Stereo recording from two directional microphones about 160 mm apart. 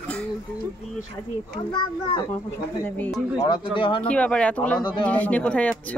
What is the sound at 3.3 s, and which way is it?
Speech, 30° left (ahead or behind).